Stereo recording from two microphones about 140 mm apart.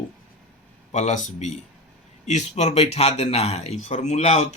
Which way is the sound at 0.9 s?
60° left (ahead or behind).